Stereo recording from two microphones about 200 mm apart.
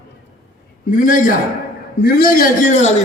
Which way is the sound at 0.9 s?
40° left (ahead or behind).